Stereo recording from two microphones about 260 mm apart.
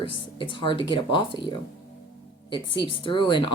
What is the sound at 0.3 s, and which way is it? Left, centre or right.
Speech, centre.